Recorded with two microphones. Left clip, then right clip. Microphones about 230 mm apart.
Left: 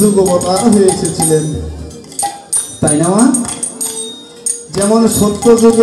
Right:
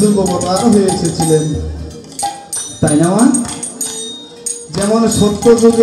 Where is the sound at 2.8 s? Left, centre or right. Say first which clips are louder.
Even; left.